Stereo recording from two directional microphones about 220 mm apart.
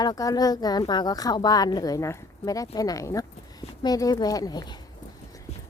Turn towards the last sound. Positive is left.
turn(degrees=20)  # may be behind; listen again after turning